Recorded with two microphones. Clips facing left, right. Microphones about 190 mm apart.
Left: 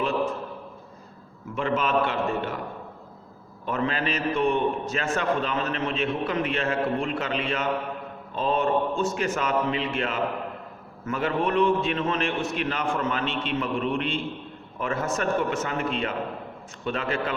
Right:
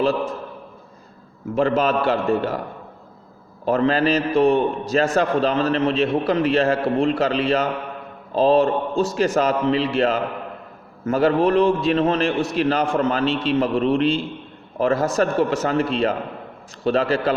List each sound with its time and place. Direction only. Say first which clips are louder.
0.0 s a man's voice: right 5 dB; 35° right (ahead or behind)
1.5 s a man's voice: right 5 dB; 35° right (ahead or behind)
3.7 s a man's voice: right 9 dB; 35° right (ahead or behind)